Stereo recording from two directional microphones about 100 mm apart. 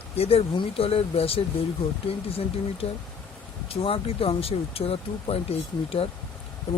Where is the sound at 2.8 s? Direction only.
90° left.